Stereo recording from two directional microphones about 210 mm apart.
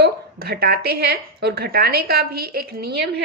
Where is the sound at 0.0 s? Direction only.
50° right (ahead or behind).